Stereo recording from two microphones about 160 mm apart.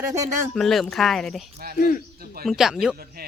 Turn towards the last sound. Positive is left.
turn(degrees=-75)  # may be behind; listen again after turning